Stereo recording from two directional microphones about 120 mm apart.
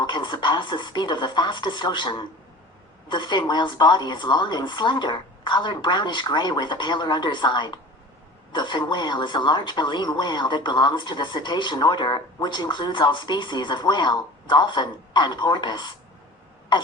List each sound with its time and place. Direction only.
0.0 s speech: 40° left (ahead or behind)